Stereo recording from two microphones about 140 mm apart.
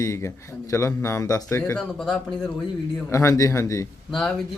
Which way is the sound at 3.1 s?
20° left (ahead or behind).